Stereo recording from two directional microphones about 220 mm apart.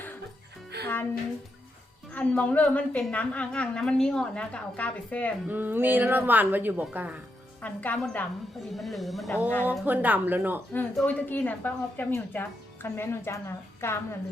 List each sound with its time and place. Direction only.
0.7 s music: 45° right (ahead or behind)
2.1 s a woman's voice: 5° left (ahead or behind)
5.5 s a woman's voice: 10° right (ahead or behind)
7.6 s a woman's voice: 5° left (ahead or behind); by 10.6 s 10° right (ahead or behind)
10.7 s a woman's voice: 5° left (ahead or behind)